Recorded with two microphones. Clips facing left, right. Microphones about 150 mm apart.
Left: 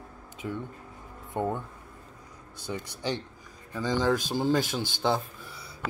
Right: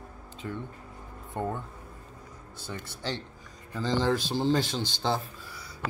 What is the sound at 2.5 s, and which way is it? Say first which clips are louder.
Speech: left 4 dB; 15° left (ahead or behind).